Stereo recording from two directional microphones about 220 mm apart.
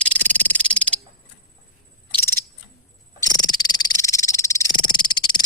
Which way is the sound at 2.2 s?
10° left (ahead or behind).